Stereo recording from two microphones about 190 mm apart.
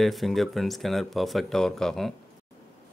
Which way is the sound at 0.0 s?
Centre (ahead or behind).